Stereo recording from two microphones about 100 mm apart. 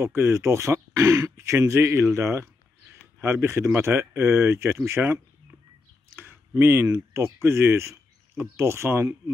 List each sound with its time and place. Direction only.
0.0 s speech: 25° right (ahead or behind)